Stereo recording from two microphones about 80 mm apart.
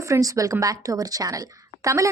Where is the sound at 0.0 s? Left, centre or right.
Right.